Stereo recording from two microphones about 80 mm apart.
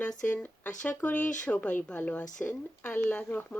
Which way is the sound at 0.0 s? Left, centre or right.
Centre.